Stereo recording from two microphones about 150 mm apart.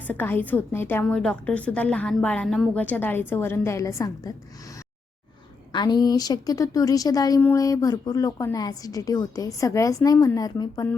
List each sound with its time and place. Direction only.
0.1 s a woman's voice: 10° left (ahead or behind)
1.0 s a woman's voice: 5° left (ahead or behind); by 4.4 s 20° left (ahead or behind)
5.7 s a woman's voice: 30° left (ahead or behind)